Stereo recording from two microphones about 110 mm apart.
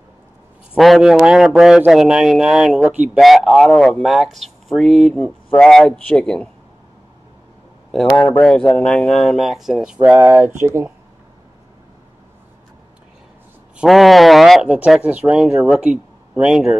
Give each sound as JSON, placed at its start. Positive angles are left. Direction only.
{"t": 0.7, "sound": "speech", "side_deg": 0}
{"t": 8.1, "sound": "speech", "side_deg": 10}
{"t": 10.0, "sound": "speech", "side_deg": -20}
{"t": 13.8, "sound": "speech", "side_deg": 0}